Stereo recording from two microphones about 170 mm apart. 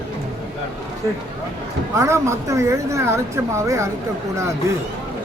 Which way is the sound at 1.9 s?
15° right (ahead or behind).